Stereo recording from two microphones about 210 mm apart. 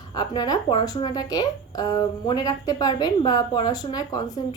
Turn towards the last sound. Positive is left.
turn(degrees=15)  # may be behind; listen again after turning